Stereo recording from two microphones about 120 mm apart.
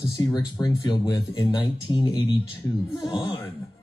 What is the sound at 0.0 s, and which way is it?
Speech, 30° left (ahead or behind).